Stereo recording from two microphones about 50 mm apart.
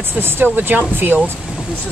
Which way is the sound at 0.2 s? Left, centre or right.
Right.